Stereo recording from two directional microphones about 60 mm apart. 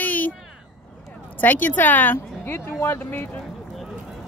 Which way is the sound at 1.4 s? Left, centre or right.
Left.